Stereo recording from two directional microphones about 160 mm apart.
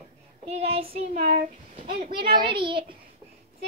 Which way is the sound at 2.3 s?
30° right (ahead or behind).